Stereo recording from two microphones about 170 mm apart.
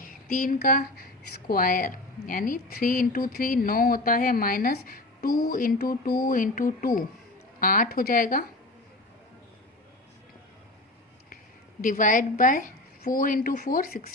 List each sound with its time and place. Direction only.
0.0 s a woman's voice: 55° left (ahead or behind)
11.8 s a woman's voice: 50° left (ahead or behind)